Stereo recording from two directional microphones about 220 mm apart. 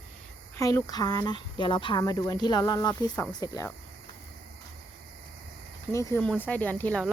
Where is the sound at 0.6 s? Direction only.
15° left (ahead or behind).